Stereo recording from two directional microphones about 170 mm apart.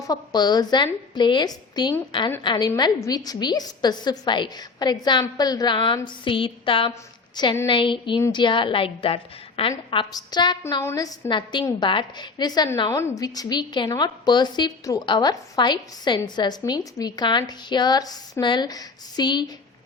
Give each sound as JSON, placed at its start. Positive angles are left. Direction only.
{"t": 0.1, "sound": "a woman's voice", "side_deg": 25}